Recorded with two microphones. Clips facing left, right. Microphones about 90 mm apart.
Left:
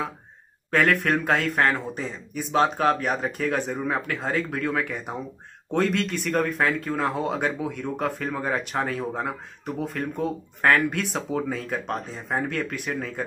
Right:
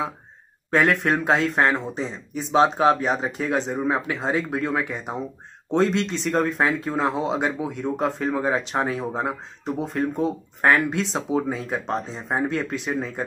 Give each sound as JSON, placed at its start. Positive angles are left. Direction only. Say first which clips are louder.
{"t": 0.7, "sound": "speech", "louder": "right 2 dB", "side_deg": -15}